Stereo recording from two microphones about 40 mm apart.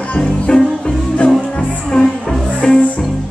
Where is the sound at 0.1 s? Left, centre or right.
Left.